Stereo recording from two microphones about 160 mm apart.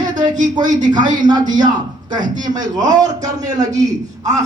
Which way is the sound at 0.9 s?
25° right (ahead or behind).